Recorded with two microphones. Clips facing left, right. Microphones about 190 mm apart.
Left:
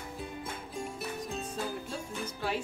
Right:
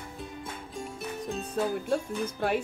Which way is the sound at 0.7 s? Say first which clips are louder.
Right 1 dB; centre (ahead or behind).